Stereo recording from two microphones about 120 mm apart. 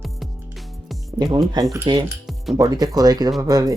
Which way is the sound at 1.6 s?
35° right (ahead or behind).